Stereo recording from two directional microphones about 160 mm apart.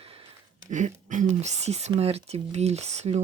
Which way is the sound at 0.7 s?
50° right (ahead or behind).